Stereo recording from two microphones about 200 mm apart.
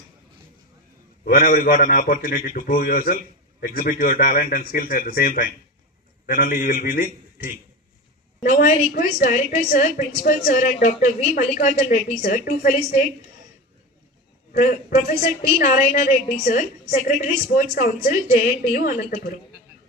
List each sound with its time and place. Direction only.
1.2 s a man's voice: 45° left (ahead or behind)
14.5 s a woman's voice: 40° left (ahead or behind)